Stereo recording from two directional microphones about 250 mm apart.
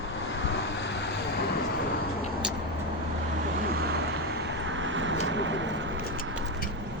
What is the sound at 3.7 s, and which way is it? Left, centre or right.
Vehicle, right.